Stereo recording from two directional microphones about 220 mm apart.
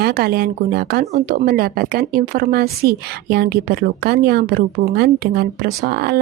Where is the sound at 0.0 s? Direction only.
45° right (ahead or behind).